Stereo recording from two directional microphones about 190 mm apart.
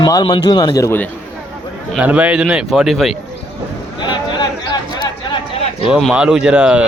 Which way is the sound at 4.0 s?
25° left (ahead or behind).